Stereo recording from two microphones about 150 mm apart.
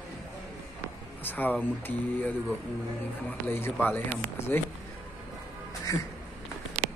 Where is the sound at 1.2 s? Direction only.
10° left (ahead or behind).